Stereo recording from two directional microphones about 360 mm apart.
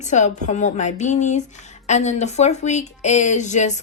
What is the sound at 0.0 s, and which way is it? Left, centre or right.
Speech, centre.